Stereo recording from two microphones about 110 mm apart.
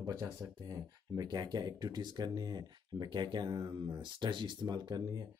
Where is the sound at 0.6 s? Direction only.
35° right (ahead or behind).